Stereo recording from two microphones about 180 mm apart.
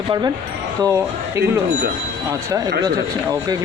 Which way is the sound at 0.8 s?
15° right (ahead or behind).